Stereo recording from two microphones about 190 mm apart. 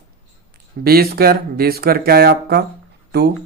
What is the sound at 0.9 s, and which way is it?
Speech, 55° right (ahead or behind).